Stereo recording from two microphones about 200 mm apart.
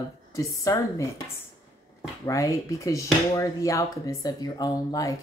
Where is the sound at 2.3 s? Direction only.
15° left (ahead or behind).